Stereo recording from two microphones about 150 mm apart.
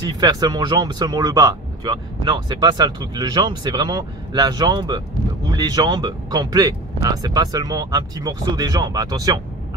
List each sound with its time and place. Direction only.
0.2 s speech: 25° right (ahead or behind)